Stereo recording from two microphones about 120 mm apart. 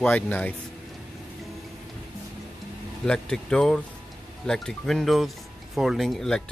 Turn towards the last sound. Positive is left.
turn(degrees=0)  # may be behind; listen again after turning